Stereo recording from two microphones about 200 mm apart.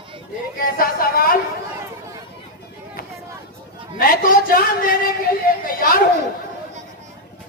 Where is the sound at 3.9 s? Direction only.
45° left (ahead or behind).